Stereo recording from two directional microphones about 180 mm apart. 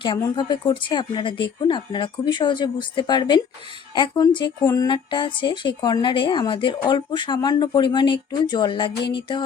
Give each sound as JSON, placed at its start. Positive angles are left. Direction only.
{"t": 0.2, "sound": "speech", "side_deg": 25}